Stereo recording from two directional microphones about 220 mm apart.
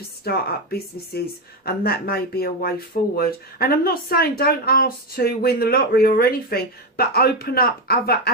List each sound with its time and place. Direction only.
0.3 s speech: 45° left (ahead or behind)